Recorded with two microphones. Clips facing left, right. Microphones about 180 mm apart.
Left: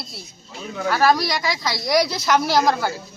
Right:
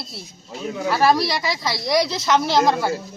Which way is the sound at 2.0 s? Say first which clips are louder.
Even; 20° right (ahead or behind).